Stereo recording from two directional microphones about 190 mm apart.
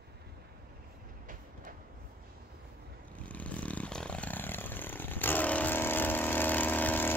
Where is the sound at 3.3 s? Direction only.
5° left (ahead or behind).